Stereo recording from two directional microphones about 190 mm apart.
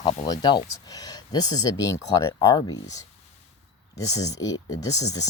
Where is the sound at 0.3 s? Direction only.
20° left (ahead or behind).